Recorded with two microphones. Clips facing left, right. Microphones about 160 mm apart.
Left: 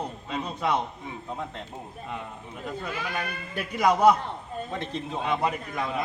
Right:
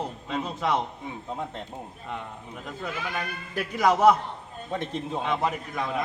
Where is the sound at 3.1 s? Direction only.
Centre (ahead or behind).